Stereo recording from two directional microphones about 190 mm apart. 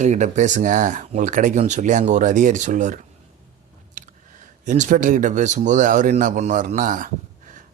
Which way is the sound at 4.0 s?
40° right (ahead or behind).